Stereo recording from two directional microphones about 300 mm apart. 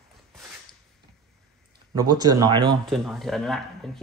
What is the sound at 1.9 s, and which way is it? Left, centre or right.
Speech, centre.